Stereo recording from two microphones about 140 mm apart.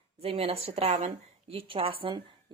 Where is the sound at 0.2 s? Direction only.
45° right (ahead or behind).